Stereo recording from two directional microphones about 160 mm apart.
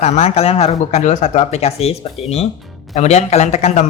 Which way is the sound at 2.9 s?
45° left (ahead or behind).